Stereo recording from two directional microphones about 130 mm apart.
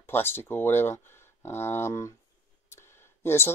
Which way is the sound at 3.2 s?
20° left (ahead or behind).